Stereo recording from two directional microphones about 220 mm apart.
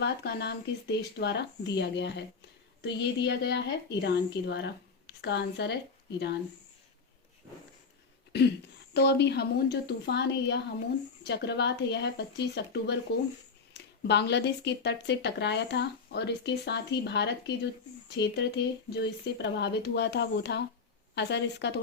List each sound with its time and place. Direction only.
0.0 s a woman's voice: 50° left (ahead or behind)
8.3 s a woman's voice: 50° left (ahead or behind)
14.1 s a woman's voice: 50° left (ahead or behind)